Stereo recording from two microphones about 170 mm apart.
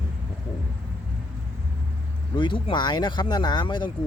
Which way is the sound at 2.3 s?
30° left (ahead or behind).